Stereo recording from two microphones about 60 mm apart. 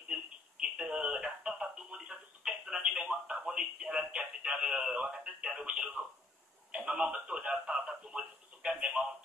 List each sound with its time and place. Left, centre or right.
0.1 s music: centre
2.0 s telephone: centre
6.7 s a sound: centre
7.6 s radio: centre